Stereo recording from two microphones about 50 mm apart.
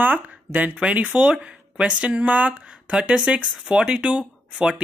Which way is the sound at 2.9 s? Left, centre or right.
Centre.